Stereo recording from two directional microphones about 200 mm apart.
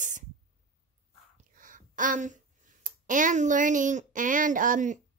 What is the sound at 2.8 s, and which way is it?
A woman's voice, 40° right (ahead or behind).